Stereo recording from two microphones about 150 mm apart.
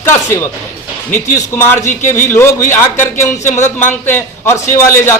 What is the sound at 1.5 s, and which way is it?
A man's voice, 15° left (ahead or behind).